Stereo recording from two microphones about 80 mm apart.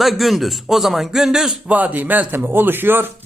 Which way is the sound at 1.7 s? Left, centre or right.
Centre.